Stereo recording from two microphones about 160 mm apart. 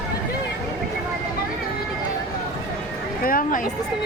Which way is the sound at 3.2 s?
60° left (ahead or behind).